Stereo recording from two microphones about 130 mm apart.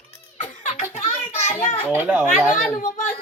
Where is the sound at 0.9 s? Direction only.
60° left (ahead or behind).